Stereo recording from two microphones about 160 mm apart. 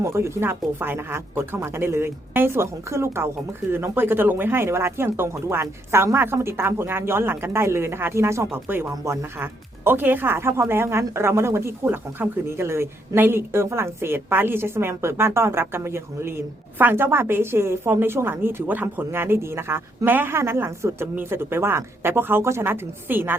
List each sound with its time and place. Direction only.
0.0 s speech: 15° right (ahead or behind)